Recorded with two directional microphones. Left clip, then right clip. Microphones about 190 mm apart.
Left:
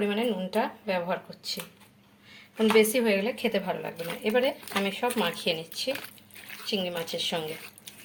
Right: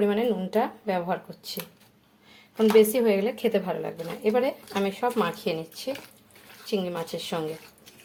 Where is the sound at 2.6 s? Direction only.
20° right (ahead or behind).